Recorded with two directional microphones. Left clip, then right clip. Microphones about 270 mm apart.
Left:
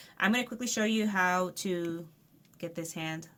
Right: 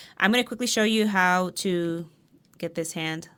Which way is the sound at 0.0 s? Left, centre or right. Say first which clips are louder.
Right 7 dB; right.